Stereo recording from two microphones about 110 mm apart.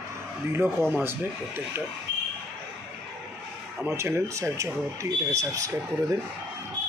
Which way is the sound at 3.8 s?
20° right (ahead or behind).